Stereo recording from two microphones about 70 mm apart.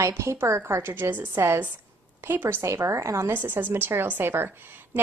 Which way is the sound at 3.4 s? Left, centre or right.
Right.